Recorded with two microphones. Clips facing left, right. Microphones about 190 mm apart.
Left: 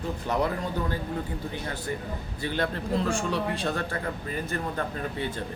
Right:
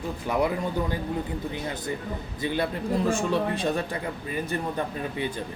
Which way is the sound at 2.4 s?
15° right (ahead or behind).